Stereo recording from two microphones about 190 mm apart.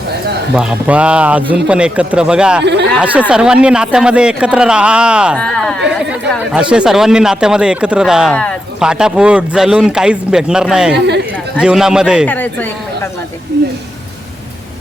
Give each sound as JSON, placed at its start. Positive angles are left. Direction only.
{"t": 0.5, "sound": "speech", "side_deg": -5}
{"t": 12.3, "sound": "speech", "side_deg": 10}
{"t": 13.5, "sound": "speech", "side_deg": -60}